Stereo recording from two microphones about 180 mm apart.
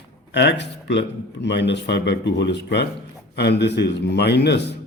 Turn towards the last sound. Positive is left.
turn(degrees=65)  # may be behind; listen again after turning